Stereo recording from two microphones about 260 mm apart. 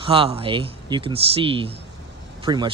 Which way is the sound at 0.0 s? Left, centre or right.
Right.